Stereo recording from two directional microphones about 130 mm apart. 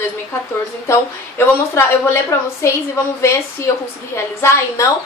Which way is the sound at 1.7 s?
20° left (ahead or behind).